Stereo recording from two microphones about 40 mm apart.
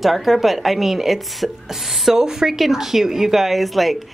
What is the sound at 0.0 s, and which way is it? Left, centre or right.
A woman's voice, centre.